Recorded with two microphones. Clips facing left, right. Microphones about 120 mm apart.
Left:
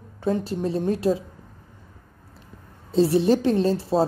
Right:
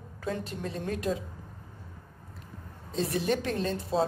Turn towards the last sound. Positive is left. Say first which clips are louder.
# left 10 dB
turn(degrees=35)  # may be behind; listen again after turning